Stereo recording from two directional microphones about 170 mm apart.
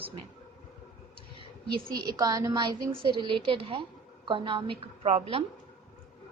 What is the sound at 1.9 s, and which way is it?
A woman's voice, 20° right (ahead or behind).